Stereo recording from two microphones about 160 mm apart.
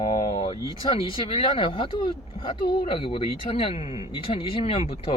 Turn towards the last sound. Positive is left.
turn(degrees=40)  # may be behind; listen again after turning